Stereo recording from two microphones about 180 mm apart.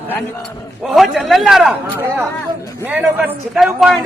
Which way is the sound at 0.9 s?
Centre (ahead or behind).